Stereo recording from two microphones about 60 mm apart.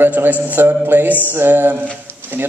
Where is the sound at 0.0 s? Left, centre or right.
Right.